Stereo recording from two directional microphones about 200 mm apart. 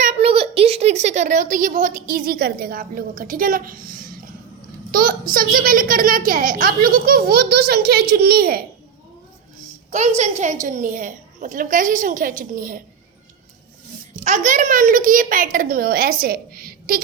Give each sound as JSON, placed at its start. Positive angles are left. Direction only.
{"t": 0.0, "sound": "a child's voice", "side_deg": -35}
{"t": 9.9, "sound": "a woman's voice", "side_deg": -35}
{"t": 14.3, "sound": "a child's voice", "side_deg": -40}